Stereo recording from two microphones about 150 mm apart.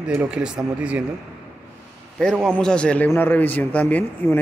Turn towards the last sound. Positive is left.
turn(degrees=10)  # may be behind; listen again after turning